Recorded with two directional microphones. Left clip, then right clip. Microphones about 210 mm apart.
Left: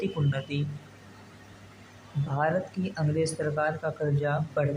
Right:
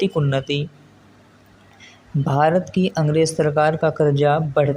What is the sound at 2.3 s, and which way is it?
Speech, 35° right (ahead or behind).